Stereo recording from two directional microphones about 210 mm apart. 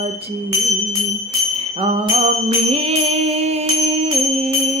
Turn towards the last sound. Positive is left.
turn(degrees=-30)  # may be behind; listen again after turning